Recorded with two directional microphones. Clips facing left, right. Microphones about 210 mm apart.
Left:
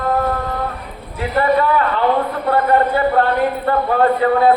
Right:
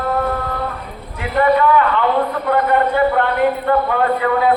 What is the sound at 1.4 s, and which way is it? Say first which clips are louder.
Speech: right 2 dB; 35° left (ahead or behind).